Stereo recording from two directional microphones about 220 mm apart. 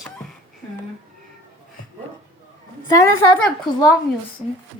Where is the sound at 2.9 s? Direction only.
15° left (ahead or behind).